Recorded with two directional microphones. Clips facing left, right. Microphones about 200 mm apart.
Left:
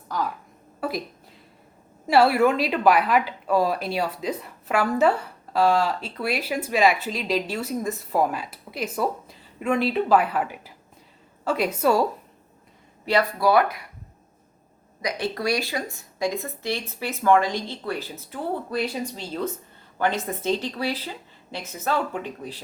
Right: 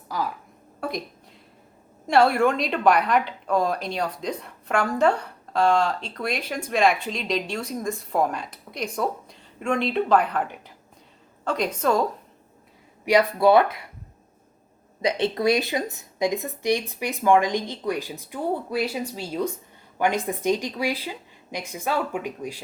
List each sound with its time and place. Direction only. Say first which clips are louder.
0.1 s a woman's voice: left 1 dB; 5° right (ahead or behind)
2.0 s a woman's voice: left 1 dB; 5° left (ahead or behind)
13.1 s speech: right 3 dB; 20° right (ahead or behind)
15.0 s speech: right 5 dB; 20° right (ahead or behind)